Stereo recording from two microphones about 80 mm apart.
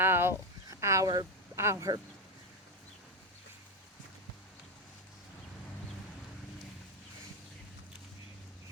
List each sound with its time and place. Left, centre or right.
0.0 s a sound: right
1.0 s speech: right
1.5 s speech: right